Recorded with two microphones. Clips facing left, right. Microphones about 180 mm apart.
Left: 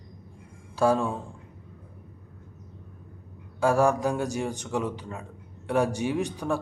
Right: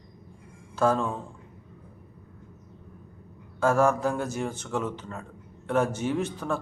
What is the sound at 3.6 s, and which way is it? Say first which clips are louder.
Speech: even; 15° left (ahead or behind).